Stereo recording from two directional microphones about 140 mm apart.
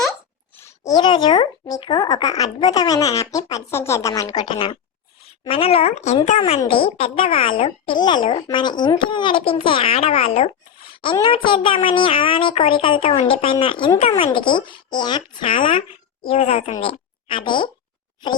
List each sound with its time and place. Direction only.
0.6 s speech: 30° left (ahead or behind); by 6.1 s 55° left (ahead or behind)
6.7 s a child's voice: 40° left (ahead or behind)
11.0 s a child's voice: 35° left (ahead or behind)
14.0 s speech: 50° left (ahead or behind)
14.3 s a child's voice: 35° left (ahead or behind)